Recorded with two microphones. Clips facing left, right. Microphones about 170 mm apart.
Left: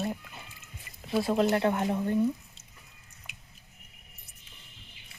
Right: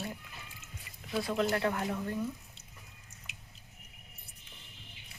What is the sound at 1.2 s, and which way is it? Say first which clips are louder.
Speech: left 5 dB; 25° left (ahead or behind).